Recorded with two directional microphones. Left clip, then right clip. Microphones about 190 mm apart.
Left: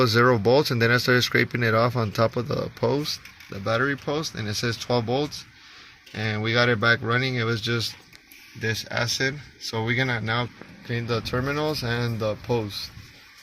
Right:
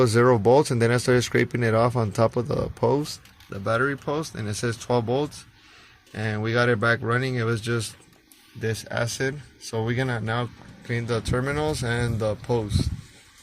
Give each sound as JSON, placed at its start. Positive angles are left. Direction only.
{"t": 0.0, "sound": "speech", "side_deg": -15}